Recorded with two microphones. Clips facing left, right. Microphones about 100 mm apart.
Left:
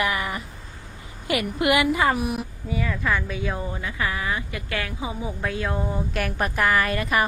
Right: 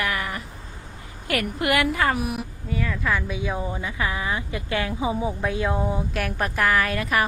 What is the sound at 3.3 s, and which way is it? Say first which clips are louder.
A woman's voice: right 1 dB; 10° right (ahead or behind).